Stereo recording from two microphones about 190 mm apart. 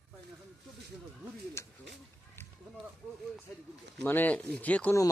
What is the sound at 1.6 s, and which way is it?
Speech, 15° left (ahead or behind).